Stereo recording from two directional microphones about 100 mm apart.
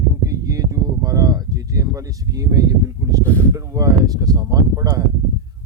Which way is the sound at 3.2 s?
15° left (ahead or behind).